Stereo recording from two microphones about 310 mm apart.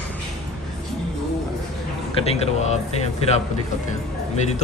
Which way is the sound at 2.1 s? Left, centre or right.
Centre.